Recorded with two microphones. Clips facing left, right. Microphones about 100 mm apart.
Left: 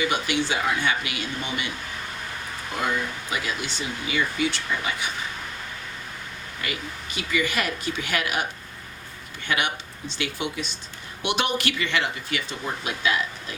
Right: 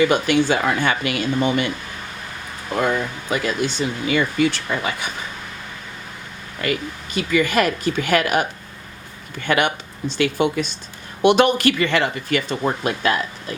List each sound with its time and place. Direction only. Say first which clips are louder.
0.0 s speech: right 8 dB; 50° right (ahead or behind)
2.8 s speech: right 4 dB; 50° right (ahead or behind)
6.6 s speech: right 9 dB; 50° right (ahead or behind)
9.5 s speech: right 7 dB; 55° right (ahead or behind)